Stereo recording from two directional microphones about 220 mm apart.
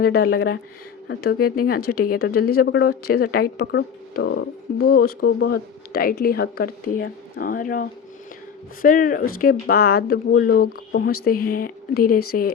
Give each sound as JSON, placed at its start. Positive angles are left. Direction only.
{"t": 0.0, "sound": "a woman's voice", "side_deg": 45}
{"t": 1.8, "sound": "speech", "side_deg": 90}
{"t": 2.0, "sound": "a woman's voice", "side_deg": 45}